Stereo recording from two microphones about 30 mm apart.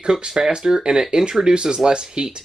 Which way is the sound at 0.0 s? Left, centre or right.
Right.